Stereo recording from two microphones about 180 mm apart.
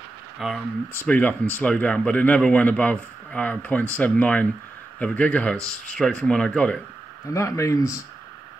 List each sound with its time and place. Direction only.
0.4 s speech: centre (ahead or behind); by 8.0 s 20° left (ahead or behind)